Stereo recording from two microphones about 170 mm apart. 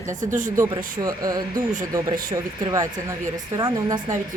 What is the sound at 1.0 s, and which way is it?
Speech, 20° right (ahead or behind).